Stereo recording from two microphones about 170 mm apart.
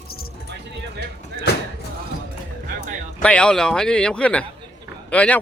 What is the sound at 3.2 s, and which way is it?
A man's voice, 5° left (ahead or behind).